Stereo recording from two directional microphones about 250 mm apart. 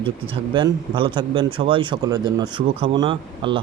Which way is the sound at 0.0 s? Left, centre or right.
Centre.